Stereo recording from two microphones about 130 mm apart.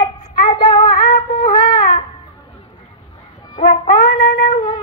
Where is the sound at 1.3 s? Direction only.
35° left (ahead or behind).